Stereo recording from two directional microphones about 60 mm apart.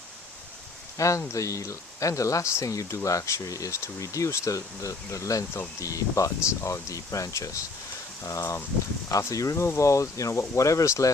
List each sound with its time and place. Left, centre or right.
0.9 s speech: left